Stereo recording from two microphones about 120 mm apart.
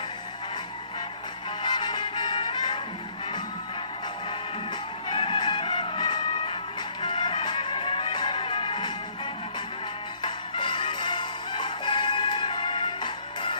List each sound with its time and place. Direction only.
1.6 s music: 40° left (ahead or behind)
5.0 s music: 45° left (ahead or behind)
10.2 s music: 40° left (ahead or behind)